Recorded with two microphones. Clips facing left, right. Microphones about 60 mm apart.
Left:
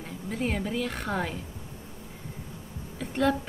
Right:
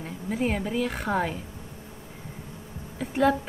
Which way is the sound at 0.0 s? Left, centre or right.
Centre.